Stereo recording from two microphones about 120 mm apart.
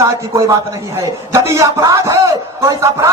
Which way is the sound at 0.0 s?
30° right (ahead or behind).